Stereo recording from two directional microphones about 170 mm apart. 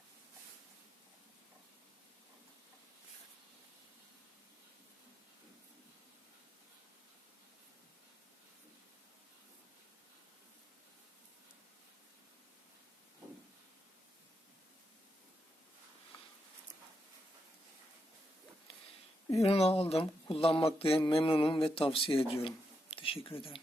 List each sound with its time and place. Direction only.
19.3 s speech: 35° left (ahead or behind)